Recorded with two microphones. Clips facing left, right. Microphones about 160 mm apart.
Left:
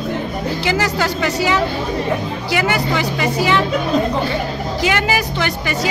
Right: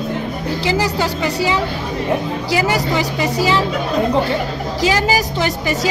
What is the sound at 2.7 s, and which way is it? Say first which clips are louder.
Speech: right 1 dB; 35° right (ahead or behind).